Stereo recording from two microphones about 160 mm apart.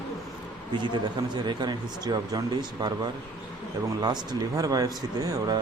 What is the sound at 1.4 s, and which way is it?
Speech, 25° right (ahead or behind).